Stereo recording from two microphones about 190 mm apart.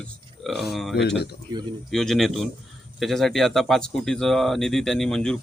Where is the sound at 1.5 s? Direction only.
20° right (ahead or behind).